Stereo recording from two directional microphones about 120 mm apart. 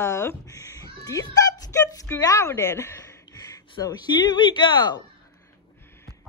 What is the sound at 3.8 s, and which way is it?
Speech, 35° left (ahead or behind).